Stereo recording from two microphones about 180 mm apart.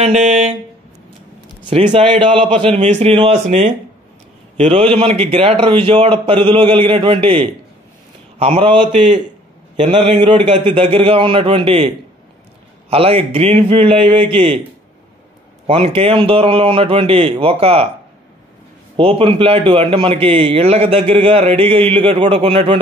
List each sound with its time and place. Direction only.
0.0 s a man's voice: 40° right (ahead or behind)
1.7 s a man's voice: 35° right (ahead or behind)
12.9 s a man's voice: 35° right (ahead or behind)
15.6 s a man's voice: 35° right (ahead or behind)
18.9 s a man's voice: 30° right (ahead or behind)